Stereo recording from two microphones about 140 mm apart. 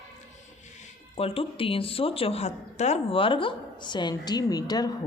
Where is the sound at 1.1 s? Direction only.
45° left (ahead or behind).